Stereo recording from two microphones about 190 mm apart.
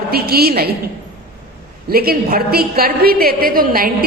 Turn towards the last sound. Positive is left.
turn(degrees=-50)  # may be behind; listen again after turning